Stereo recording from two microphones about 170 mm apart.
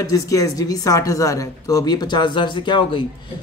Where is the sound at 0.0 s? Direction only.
20° left (ahead or behind).